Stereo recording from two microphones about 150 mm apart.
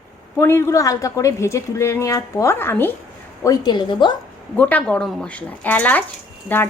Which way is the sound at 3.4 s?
30° left (ahead or behind).